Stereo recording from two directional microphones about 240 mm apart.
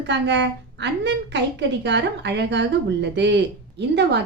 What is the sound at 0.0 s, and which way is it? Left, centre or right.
A woman's voice, right.